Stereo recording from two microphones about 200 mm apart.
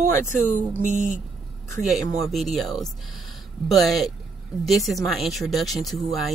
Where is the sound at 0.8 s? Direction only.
35° right (ahead or behind).